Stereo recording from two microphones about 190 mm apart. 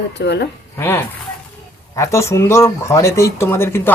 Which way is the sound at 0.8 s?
10° left (ahead or behind).